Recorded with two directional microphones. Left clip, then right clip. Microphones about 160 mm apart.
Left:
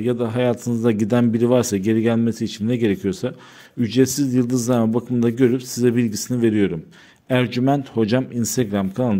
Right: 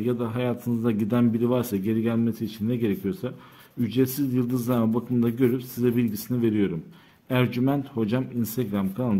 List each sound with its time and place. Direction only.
0.0 s speech: 35° left (ahead or behind)